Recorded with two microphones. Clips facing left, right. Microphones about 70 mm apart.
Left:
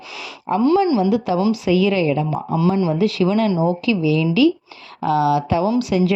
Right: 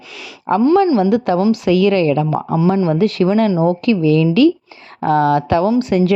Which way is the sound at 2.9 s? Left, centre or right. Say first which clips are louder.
Right 3 dB; right.